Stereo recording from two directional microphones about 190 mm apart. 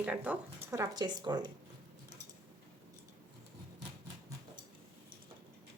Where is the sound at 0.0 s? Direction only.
5° right (ahead or behind).